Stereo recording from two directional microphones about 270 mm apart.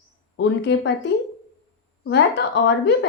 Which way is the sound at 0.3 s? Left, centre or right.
Left.